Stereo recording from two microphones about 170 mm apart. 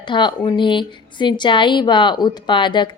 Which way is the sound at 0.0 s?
25° left (ahead or behind).